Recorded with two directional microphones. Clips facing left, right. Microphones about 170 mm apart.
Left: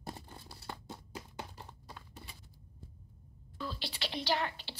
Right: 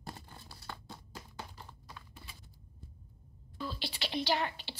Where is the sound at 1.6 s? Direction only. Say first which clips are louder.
Left 1 dB; 30° left (ahead or behind).